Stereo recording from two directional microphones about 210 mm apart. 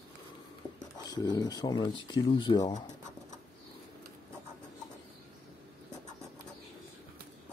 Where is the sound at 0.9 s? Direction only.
20° left (ahead or behind).